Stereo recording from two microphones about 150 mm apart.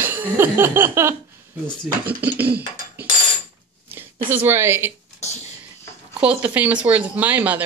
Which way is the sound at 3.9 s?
15° right (ahead or behind).